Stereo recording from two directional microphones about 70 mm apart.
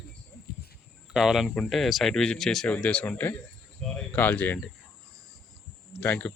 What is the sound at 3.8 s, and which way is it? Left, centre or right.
Speech, centre.